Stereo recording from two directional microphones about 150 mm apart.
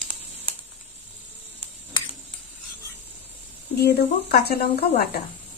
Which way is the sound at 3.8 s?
90° left.